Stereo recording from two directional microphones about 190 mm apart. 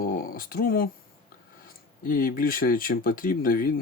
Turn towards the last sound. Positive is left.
turn(degrees=50)  # may be behind; listen again after turning